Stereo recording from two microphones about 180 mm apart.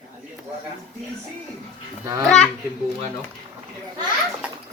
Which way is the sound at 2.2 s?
5° left (ahead or behind).